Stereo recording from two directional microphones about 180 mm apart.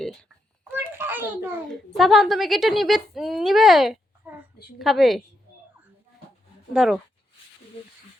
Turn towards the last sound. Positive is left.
turn(degrees=0)  # may be behind; listen again after turning